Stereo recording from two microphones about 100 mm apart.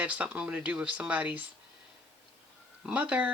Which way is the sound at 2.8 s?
15° right (ahead or behind).